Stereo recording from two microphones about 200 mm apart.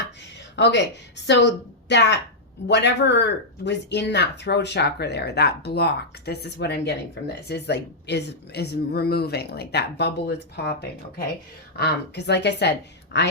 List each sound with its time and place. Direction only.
0.5 s a woman's voice: 60° left (ahead or behind)